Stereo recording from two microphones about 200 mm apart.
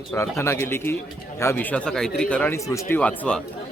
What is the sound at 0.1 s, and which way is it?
Speech, 15° left (ahead or behind).